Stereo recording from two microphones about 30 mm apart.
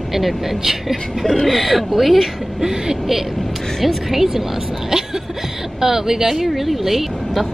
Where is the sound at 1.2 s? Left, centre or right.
Centre.